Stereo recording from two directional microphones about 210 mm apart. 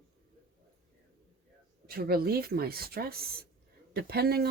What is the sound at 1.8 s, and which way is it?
Speech, 45° right (ahead or behind).